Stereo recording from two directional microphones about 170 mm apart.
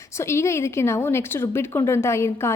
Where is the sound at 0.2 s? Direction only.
15° left (ahead or behind).